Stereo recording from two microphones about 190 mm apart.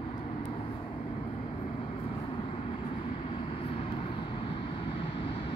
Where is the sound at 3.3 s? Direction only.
30° left (ahead or behind).